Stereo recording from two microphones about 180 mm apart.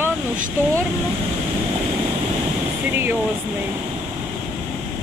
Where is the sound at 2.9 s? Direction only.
10° right (ahead or behind).